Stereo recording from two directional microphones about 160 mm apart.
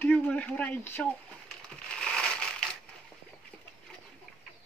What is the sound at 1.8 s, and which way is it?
Crushing, 5° left (ahead or behind).